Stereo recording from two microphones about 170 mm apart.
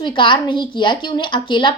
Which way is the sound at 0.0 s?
30° left (ahead or behind).